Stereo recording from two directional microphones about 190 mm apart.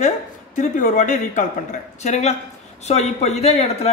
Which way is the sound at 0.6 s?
40° left (ahead or behind).